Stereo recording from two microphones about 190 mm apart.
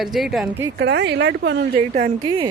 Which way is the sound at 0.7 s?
60° right (ahead or behind).